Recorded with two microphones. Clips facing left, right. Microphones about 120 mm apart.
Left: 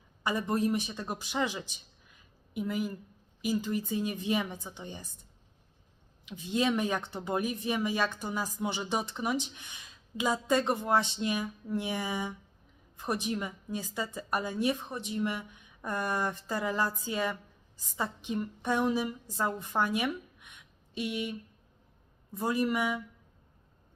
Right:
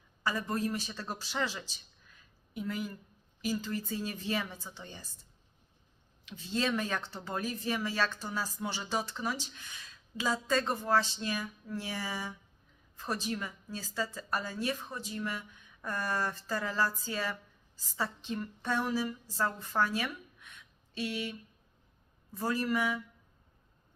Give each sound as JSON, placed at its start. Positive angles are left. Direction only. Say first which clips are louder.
{"t": 0.2, "sound": "a woman's voice", "louder": "left 3 dB", "side_deg": 20}
{"t": 6.2, "sound": "a woman's voice", "louder": "left 4 dB", "side_deg": 15}